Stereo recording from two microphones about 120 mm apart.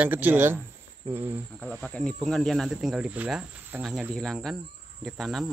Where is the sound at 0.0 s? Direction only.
15° right (ahead or behind).